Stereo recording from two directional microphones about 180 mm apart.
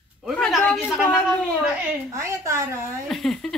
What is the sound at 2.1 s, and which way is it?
Speech, 15° right (ahead or behind).